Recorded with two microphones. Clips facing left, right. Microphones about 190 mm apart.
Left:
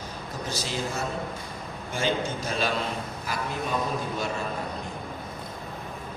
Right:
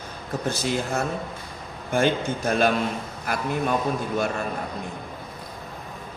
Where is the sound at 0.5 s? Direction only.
55° right (ahead or behind).